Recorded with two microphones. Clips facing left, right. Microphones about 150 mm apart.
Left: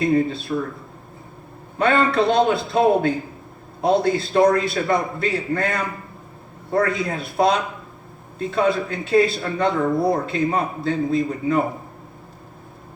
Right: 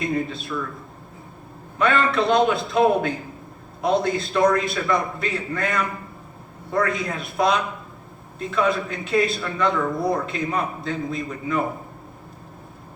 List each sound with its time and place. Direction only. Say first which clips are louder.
0.0 s a man's voice: left 6 dB; 30° left (ahead or behind)
1.8 s a man's voice: left 2 dB; 30° left (ahead or behind)